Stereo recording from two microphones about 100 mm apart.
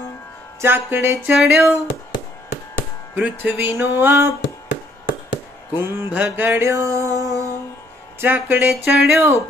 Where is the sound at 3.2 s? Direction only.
15° right (ahead or behind).